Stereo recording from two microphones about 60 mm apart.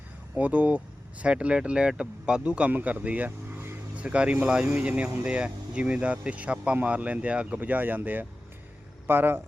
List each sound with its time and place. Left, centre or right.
0.3 s speech: right
3.9 s speech: centre; by 9.4 s right